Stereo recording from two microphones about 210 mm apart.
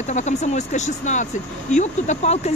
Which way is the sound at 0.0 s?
35° left (ahead or behind).